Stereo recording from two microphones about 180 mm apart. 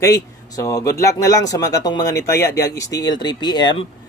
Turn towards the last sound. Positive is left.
turn(degrees=25)  # may be behind; listen again after turning